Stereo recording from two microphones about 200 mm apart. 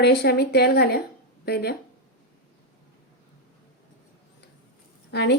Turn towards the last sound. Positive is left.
turn(degrees=55)  # may be behind; listen again after turning